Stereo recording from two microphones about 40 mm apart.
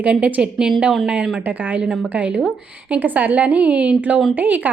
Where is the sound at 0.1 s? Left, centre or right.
Right.